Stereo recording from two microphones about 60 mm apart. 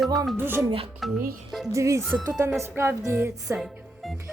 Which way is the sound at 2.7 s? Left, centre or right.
Right.